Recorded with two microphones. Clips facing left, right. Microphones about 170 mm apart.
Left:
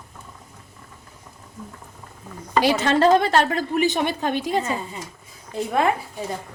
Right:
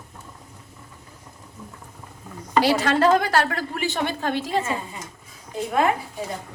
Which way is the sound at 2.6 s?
20° left (ahead or behind).